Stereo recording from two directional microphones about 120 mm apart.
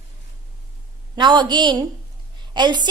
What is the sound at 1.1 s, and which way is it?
A woman's voice, 40° right (ahead or behind).